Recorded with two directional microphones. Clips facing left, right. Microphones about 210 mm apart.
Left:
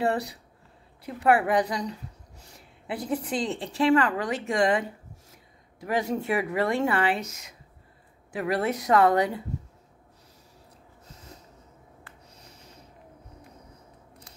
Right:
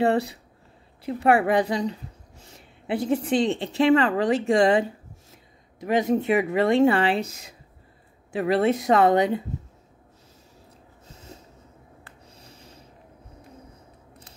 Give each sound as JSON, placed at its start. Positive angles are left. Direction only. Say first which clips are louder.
{"t": 0.0, "sound": "a woman's voice", "louder": "right 5 dB", "side_deg": -25}